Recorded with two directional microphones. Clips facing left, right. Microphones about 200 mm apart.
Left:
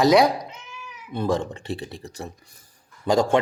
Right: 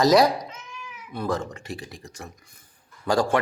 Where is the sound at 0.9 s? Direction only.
25° left (ahead or behind).